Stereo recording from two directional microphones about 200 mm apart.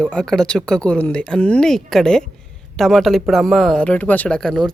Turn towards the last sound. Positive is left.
turn(degrees=0)  # may be behind; listen again after turning